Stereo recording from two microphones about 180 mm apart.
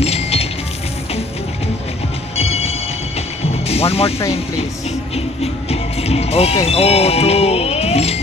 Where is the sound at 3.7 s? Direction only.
35° left (ahead or behind).